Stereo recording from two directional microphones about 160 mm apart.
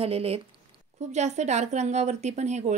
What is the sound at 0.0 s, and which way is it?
A woman's voice, 35° right (ahead or behind).